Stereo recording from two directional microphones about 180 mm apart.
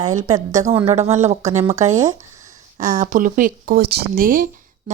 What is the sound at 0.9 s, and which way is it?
Speech, 35° right (ahead or behind).